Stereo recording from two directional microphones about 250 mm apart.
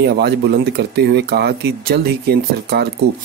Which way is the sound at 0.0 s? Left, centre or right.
Right.